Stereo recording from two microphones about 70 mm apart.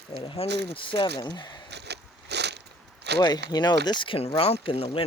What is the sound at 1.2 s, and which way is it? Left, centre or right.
Speech, left.